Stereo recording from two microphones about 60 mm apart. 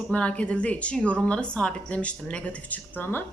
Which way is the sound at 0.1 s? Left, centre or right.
Left.